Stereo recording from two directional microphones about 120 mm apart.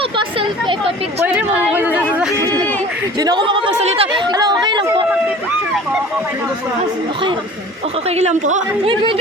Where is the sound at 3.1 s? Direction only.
35° right (ahead or behind).